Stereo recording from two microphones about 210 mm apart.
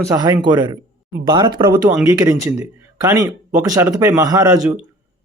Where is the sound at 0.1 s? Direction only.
15° right (ahead or behind).